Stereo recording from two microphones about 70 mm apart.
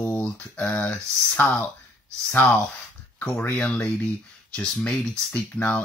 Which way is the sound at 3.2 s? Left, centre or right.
Left.